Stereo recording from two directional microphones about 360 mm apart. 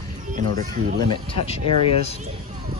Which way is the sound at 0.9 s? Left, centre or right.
Centre.